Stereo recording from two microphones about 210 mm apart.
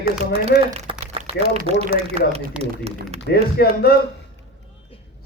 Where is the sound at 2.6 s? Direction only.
5° right (ahead or behind).